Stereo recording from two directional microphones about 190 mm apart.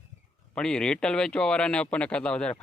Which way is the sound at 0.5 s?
5° left (ahead or behind).